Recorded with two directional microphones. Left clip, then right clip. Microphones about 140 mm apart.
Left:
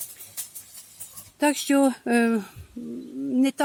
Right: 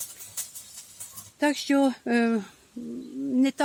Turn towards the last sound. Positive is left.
turn(degrees=20)  # may be behind; listen again after turning